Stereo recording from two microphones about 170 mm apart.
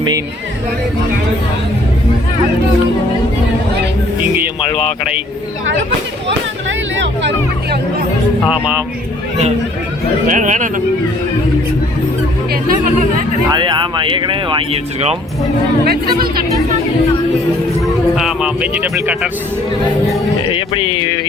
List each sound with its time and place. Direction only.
4.7 s speech: 35° left (ahead or behind)
6.2 s speech: 90° right
8.4 s a man's voice: 5° right (ahead or behind)
10.2 s speech: 45° right (ahead or behind)
12.6 s speech: 55° right (ahead or behind)
13.5 s speech: 25° right (ahead or behind)
17.8 s speech: centre (ahead or behind)
20.5 s speech: 30° left (ahead or behind)